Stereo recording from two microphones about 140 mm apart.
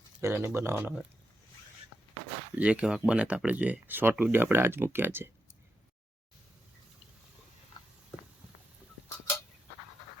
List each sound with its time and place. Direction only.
0.2 s speech: 20° right (ahead or behind)
2.6 s speech: 10° right (ahead or behind)